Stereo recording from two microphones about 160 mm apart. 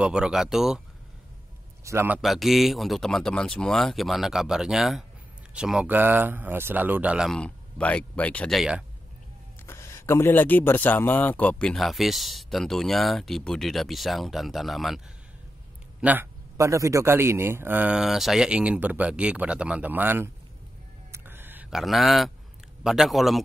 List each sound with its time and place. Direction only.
0.0 s speech: 5° right (ahead or behind)
1.9 s a man's voice: 15° right (ahead or behind)
2.2 s a man's voice: centre (ahead or behind)
9.7 s speech: 15° left (ahead or behind); by 15.0 s centre (ahead or behind)
16.0 s a man's voice: 10° right (ahead or behind)
21.1 s a sound: 15° right (ahead or behind)
22.8 s speech: centre (ahead or behind)